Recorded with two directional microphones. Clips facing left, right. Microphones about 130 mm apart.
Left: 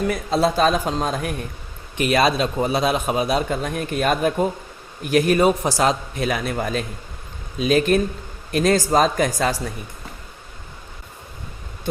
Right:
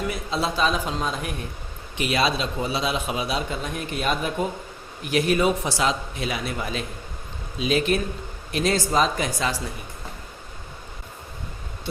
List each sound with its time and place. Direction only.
0.1 s a man's voice: 45° left (ahead or behind)